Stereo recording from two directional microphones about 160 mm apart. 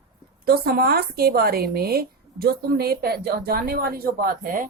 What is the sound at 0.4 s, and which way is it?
Speech, 70° right (ahead or behind).